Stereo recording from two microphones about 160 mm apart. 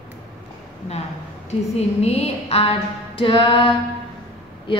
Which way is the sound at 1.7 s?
40° left (ahead or behind).